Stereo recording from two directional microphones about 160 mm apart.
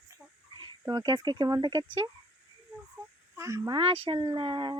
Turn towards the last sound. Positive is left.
turn(degrees=-30)  # may be behind; listen again after turning